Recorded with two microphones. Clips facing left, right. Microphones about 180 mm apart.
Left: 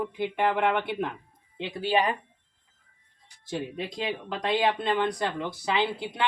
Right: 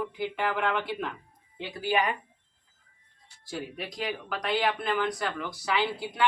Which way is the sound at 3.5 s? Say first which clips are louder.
Left 4 dB; 25° left (ahead or behind).